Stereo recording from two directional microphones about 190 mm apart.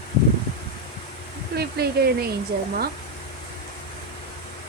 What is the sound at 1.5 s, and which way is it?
Speech, 55° right (ahead or behind).